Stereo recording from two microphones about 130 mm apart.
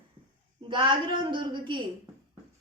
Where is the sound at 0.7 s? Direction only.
40° right (ahead or behind).